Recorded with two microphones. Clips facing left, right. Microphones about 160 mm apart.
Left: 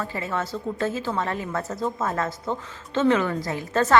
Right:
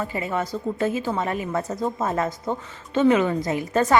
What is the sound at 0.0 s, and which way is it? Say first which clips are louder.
A woman's voice: right 2 dB; 15° right (ahead or behind).